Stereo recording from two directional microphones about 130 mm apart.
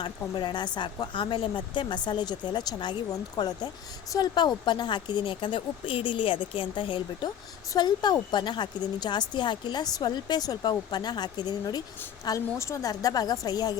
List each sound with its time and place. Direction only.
0.3 s a woman's voice: 35° left (ahead or behind)